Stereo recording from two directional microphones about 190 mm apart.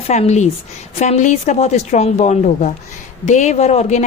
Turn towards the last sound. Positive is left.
turn(degrees=35)  # may be behind; listen again after turning